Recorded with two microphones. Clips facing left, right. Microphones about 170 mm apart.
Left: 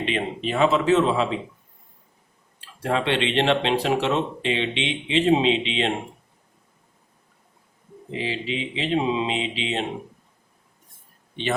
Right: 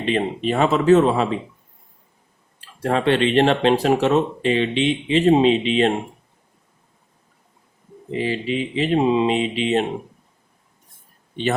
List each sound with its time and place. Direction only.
0.0 s speech: 40° right (ahead or behind)
2.6 s speech: 45° right (ahead or behind)
8.1 s speech: 45° right (ahead or behind)